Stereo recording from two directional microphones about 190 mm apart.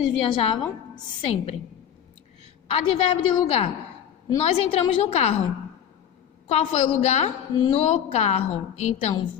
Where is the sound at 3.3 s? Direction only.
30° left (ahead or behind).